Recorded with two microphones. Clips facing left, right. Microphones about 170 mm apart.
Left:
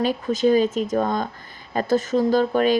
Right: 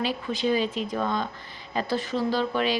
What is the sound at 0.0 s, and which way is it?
Speech, 45° left (ahead or behind).